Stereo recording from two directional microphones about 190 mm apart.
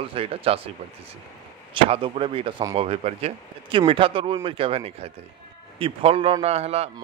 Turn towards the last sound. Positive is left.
turn(degrees=-35)  # may be behind; listen again after turning